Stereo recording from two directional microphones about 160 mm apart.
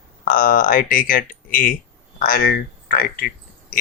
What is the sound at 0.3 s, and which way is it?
Speech, 60° left (ahead or behind).